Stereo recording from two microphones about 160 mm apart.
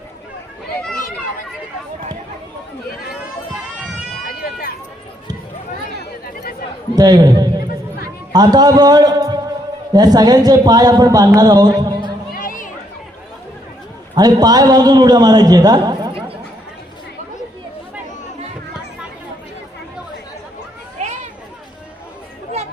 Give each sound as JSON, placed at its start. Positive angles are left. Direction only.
{"t": 6.9, "sound": "a man's voice", "side_deg": -25}
{"t": 11.3, "sound": "music", "side_deg": -25}
{"t": 12.4, "sound": "run", "side_deg": 60}
{"t": 14.2, "sound": "a man's voice", "side_deg": -25}